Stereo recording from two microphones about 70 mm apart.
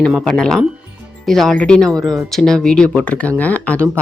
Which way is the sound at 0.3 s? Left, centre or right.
Centre.